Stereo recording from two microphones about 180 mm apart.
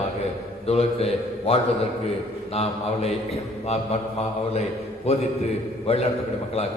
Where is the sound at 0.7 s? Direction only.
35° left (ahead or behind).